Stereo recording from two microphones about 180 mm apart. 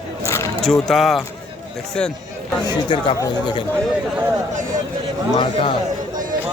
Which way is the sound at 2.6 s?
25° left (ahead or behind).